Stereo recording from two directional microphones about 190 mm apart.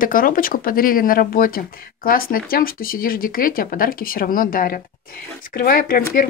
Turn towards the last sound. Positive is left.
turn(degrees=50)  # may be behind; listen again after turning